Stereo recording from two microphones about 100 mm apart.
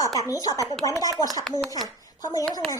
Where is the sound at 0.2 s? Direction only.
35° left (ahead or behind).